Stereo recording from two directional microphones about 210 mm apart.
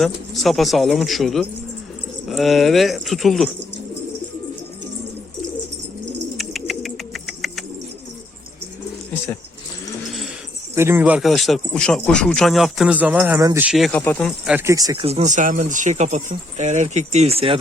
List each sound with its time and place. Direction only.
0.0 s speech: centre (ahead or behind)
6.3 s bird: centre (ahead or behind)
10.8 s speech: 10° right (ahead or behind); by 14.3 s 5° left (ahead or behind)
14.4 s speech: 10° right (ahead or behind)
15.0 s speech: 30° right (ahead or behind)